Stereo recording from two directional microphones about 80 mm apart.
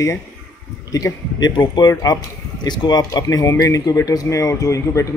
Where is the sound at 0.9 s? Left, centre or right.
Left.